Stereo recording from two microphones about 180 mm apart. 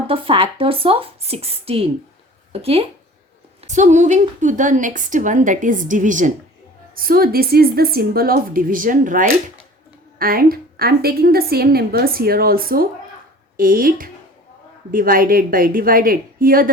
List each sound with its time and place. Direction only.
0.1 s a woman's voice: 30° right (ahead or behind); by 16.6 s 50° right (ahead or behind)